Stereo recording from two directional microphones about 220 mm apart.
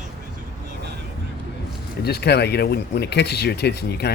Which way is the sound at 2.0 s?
45° left (ahead or behind).